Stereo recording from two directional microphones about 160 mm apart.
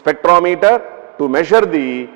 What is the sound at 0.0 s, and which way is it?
A man's voice, 20° right (ahead or behind).